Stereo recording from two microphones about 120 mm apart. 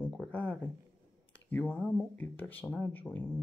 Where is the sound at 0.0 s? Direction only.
10° left (ahead or behind).